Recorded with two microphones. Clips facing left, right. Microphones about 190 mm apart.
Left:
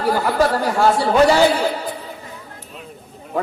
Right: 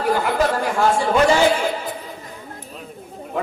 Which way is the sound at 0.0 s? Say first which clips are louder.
Left 2 dB; 40° left (ahead or behind).